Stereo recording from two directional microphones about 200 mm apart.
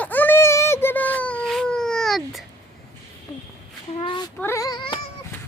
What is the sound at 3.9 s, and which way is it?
Speech, 25° left (ahead or behind).